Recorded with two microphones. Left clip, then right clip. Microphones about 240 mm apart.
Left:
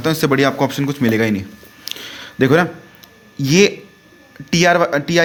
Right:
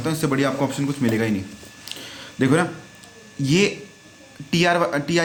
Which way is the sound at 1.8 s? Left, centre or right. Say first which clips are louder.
Left 6 dB; left.